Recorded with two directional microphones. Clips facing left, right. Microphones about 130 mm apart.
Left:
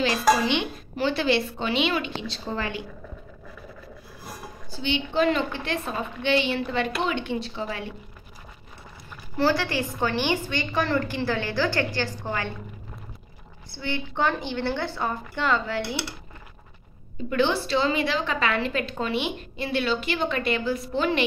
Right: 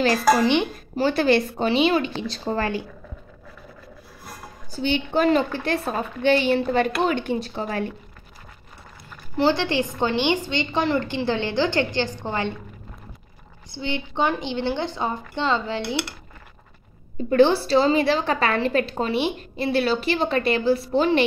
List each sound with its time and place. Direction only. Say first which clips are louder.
0.9 s a woman's voice: right 4 dB; 45° right (ahead or behind)
4.7 s a woman's voice: right 2 dB; 45° right (ahead or behind)
9.4 s a woman's voice: right 3 dB; 25° right (ahead or behind)
13.7 s a woman's voice: right 2 dB; 20° right (ahead or behind)
17.3 s a woman's voice: right 7 dB; 35° right (ahead or behind)